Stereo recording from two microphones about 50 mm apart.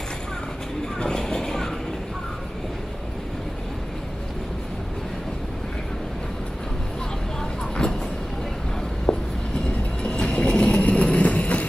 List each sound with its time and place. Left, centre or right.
0.9 s music: centre
7.8 s vehicle: centre
9.1 s a sound: left
10.0 s train: centre